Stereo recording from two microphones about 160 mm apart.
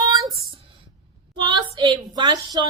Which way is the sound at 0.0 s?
25° right (ahead or behind).